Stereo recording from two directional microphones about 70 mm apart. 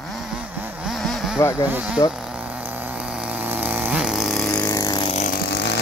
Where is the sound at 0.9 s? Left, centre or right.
Centre.